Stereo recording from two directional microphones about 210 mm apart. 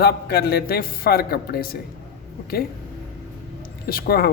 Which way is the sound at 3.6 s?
45° left (ahead or behind).